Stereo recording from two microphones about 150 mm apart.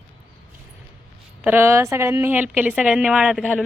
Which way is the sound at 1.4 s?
15° right (ahead or behind).